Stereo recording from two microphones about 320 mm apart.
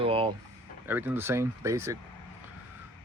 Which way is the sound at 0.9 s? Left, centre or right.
Centre.